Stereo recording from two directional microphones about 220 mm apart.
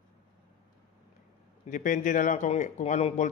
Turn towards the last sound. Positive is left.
turn(degrees=30)  # may be behind; listen again after turning